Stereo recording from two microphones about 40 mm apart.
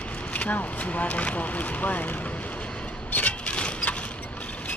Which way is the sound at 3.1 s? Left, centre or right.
Left.